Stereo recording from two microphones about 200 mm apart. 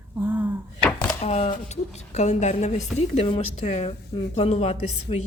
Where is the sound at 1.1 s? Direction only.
30° left (ahead or behind).